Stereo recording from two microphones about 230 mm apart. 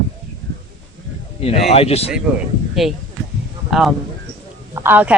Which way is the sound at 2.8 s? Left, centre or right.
Centre.